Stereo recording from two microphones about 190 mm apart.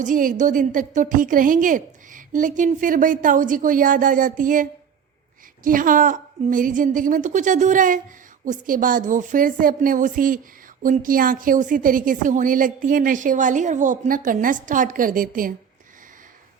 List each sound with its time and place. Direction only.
0.0 s a woman's voice: 45° right (ahead or behind)